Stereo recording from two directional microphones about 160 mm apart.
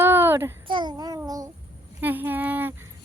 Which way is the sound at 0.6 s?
30° right (ahead or behind).